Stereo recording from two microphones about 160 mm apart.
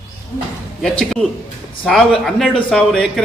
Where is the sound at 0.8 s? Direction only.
5° left (ahead or behind).